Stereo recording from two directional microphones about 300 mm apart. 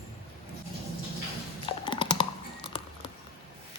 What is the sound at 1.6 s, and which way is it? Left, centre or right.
Typing, centre.